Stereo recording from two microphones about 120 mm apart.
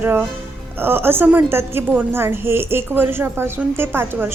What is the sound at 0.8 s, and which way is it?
A woman's voice, 20° right (ahead or behind).